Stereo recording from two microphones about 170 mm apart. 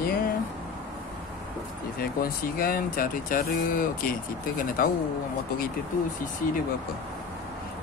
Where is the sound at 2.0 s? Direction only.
60° left (ahead or behind).